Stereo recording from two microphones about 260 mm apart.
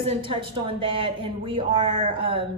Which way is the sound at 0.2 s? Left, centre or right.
Centre.